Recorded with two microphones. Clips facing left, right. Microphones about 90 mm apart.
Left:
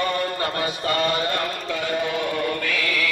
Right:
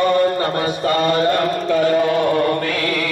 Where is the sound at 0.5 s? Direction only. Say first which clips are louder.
Right 6 dB; 35° right (ahead or behind).